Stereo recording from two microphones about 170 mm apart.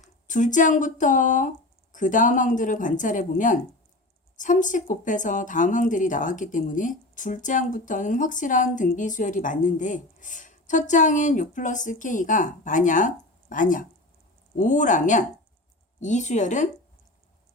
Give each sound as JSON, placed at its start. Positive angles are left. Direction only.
{"t": 0.0, "sound": "speech", "side_deg": 45}